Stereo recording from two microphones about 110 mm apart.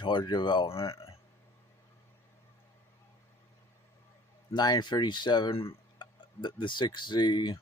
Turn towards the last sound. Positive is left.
turn(degrees=50)  # may be behind; listen again after turning